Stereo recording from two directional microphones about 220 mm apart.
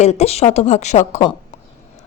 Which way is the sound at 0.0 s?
30° left (ahead or behind).